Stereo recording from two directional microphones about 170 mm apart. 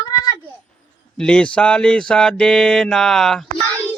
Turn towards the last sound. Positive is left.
turn(degrees=0)  # may be behind; listen again after turning